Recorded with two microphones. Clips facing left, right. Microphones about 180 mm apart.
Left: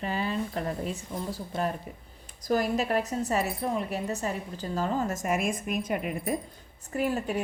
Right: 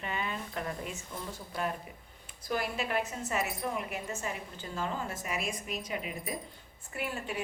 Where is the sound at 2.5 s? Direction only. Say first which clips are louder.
Left 7 dB; 40° left (ahead or behind).